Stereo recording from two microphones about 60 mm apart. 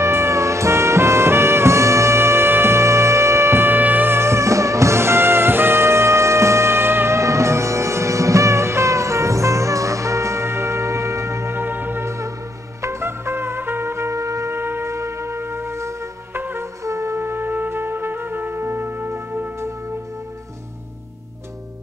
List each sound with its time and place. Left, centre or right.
0.0 s music: right
14.6 s music: right
16.3 s music: right
16.8 s music: right